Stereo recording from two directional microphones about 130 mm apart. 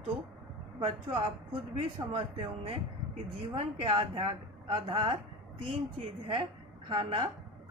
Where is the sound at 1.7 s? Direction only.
45° right (ahead or behind).